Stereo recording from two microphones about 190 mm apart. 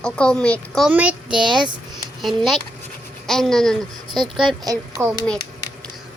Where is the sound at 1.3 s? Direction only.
25° right (ahead or behind).